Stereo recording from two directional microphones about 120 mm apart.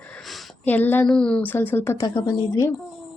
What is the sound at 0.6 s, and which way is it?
A woman's voice, 15° left (ahead or behind).